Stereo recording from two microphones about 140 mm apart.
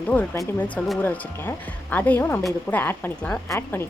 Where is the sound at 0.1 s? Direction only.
10° left (ahead or behind).